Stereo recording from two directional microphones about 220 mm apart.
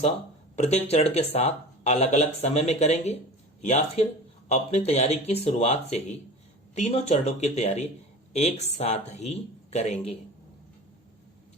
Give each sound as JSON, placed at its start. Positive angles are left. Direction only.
{"t": 0.5, "sound": "speech", "side_deg": 30}